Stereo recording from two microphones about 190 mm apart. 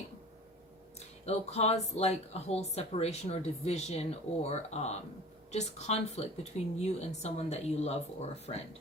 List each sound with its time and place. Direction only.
0.9 s speech: 35° left (ahead or behind)